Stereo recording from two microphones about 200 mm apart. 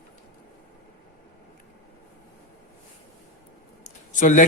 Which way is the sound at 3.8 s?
40° left (ahead or behind).